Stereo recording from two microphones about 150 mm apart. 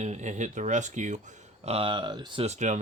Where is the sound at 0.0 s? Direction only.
50° right (ahead or behind); by 2.4 s 30° right (ahead or behind).